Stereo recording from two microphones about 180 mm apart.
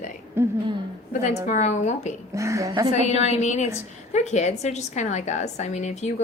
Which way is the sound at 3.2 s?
40° left (ahead or behind).